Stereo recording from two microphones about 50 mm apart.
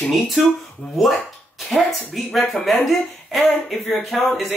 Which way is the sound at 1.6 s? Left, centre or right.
Centre.